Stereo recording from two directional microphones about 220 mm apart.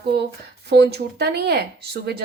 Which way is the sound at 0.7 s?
50° right (ahead or behind).